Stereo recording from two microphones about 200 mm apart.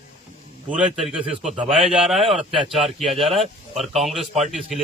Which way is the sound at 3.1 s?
30° right (ahead or behind).